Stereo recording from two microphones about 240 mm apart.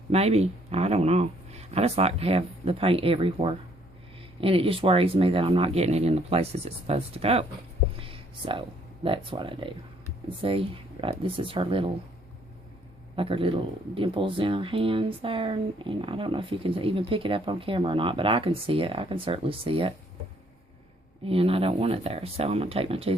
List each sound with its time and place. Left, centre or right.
0.1 s speech: right
7.9 s a sound: right
9.0 s speech: right
13.1 s speech: right
21.2 s speech: right